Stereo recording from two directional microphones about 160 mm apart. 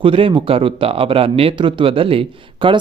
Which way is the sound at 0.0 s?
35° right (ahead or behind).